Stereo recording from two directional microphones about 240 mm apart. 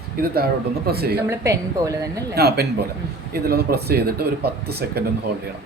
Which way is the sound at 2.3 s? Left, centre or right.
Right.